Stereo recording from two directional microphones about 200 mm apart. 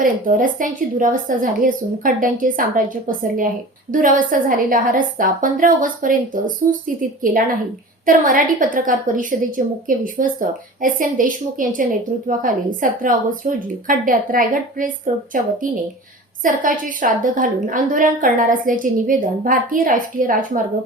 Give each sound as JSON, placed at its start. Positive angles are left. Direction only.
{"t": 0.0, "sound": "a woman's voice", "side_deg": -40}